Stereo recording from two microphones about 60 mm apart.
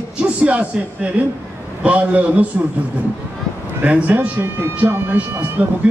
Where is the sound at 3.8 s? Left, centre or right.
Right.